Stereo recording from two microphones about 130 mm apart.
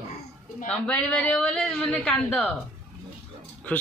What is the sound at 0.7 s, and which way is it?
A woman's voice, 5° left (ahead or behind).